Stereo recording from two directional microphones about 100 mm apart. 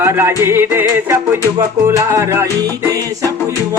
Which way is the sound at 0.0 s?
25° right (ahead or behind).